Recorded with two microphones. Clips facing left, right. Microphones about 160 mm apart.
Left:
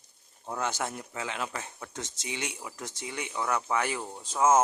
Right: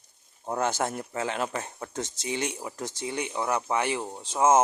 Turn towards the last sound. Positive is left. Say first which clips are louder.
# right 2 dB
turn(degrees=-20)  # may be behind; listen again after turning